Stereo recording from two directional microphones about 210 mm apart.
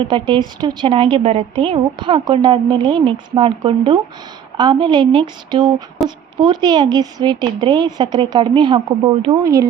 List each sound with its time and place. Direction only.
0.0 s a woman's voice: 20° right (ahead or behind)
6.0 s speech: centre (ahead or behind)
6.4 s a woman's voice: 20° right (ahead or behind)